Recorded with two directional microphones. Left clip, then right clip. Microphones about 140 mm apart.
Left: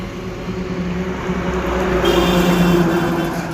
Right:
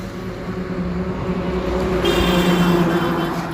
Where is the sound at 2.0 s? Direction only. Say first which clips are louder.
Left 2 dB; 75° left (ahead or behind).